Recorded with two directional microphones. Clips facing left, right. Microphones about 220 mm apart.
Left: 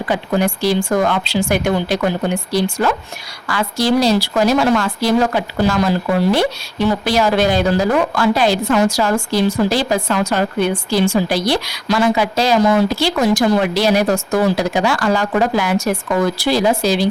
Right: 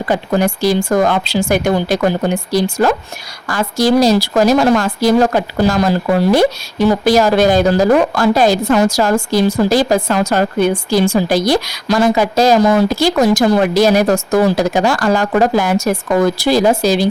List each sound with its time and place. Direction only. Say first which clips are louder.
0.0 s speech: right 2 dB; 40° right (ahead or behind)